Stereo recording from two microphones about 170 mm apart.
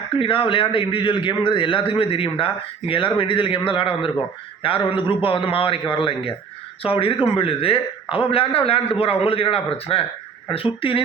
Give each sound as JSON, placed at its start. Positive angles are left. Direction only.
{"t": 0.2, "sound": "a man's voice", "side_deg": 30}